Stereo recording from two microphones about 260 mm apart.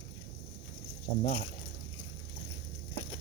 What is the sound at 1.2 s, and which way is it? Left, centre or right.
Speech, left.